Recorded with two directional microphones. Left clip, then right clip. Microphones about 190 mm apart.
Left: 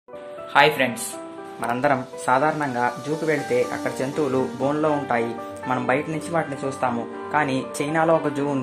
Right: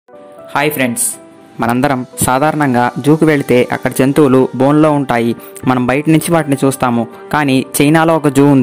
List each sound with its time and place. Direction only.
0.5 s speech: 60° right (ahead or behind)